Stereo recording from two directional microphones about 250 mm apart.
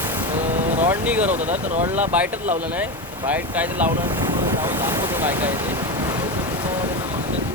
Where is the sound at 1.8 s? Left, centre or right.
Centre.